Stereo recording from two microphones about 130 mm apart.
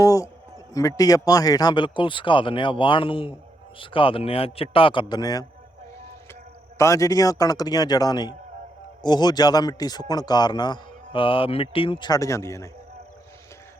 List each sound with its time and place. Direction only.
0.0 s a man's voice: 25° left (ahead or behind)
6.7 s a man's voice: 25° left (ahead or behind)